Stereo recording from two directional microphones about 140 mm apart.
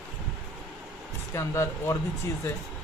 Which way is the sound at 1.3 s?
20° left (ahead or behind).